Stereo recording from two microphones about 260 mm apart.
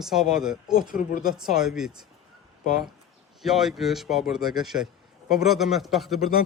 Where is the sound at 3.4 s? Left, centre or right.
Centre.